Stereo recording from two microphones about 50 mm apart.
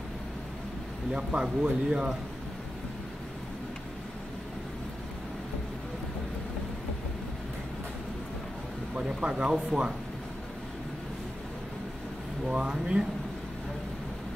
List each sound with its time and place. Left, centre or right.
1.1 s speech: centre
8.9 s speech: centre
12.4 s speech: centre